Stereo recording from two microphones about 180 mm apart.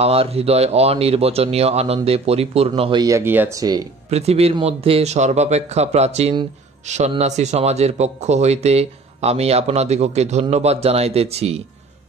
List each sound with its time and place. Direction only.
0.0 s speech: 35° right (ahead or behind)
4.1 s speech: 35° right (ahead or behind)